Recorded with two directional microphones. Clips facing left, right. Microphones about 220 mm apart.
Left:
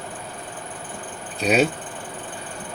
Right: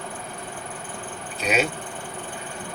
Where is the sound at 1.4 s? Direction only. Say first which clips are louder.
Left 5 dB; 35° left (ahead or behind).